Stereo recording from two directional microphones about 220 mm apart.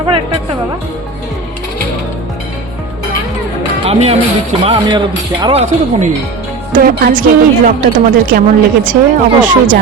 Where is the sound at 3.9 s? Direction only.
30° right (ahead or behind).